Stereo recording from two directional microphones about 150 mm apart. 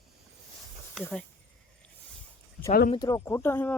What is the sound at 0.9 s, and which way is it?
Speech, 5° left (ahead or behind).